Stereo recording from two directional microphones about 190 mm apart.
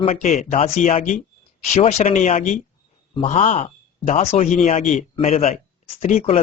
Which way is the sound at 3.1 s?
30° left (ahead or behind).